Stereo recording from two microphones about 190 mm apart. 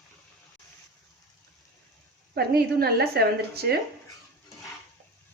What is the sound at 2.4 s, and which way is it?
A woman's voice, 55° right (ahead or behind).